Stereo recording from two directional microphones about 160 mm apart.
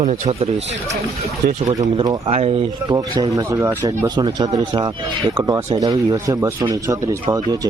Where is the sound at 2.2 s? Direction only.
40° right (ahead or behind).